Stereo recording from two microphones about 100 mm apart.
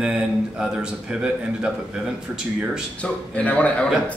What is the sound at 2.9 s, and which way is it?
Speech, 15° left (ahead or behind).